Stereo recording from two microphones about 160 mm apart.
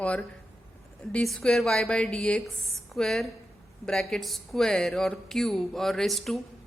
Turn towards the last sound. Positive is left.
turn(degrees=0)  # may be behind; listen again after turning